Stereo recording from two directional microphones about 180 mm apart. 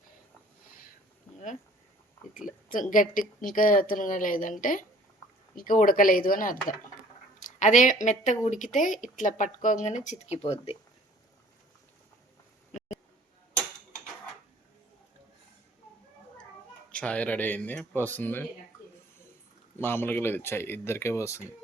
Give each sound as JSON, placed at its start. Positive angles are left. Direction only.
{"t": 2.3, "sound": "speech", "side_deg": 45}
{"t": 16.9, "sound": "speech", "side_deg": 5}
{"t": 19.8, "sound": "speech", "side_deg": 10}